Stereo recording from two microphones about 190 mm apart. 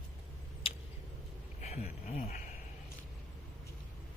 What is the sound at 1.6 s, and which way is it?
Speech, 35° left (ahead or behind).